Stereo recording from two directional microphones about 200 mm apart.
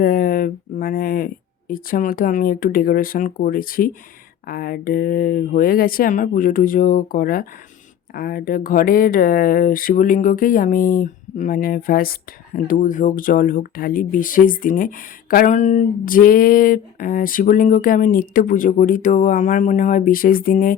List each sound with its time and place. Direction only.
0.0 s speech: 45° left (ahead or behind)